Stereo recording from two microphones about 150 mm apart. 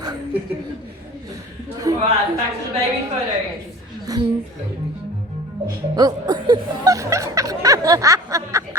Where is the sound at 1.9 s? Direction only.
20° right (ahead or behind).